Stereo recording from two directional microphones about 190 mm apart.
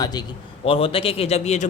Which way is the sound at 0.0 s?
20° left (ahead or behind).